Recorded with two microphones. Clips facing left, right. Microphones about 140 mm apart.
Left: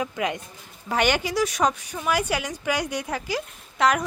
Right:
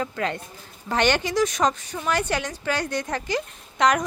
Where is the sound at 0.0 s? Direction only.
10° left (ahead or behind).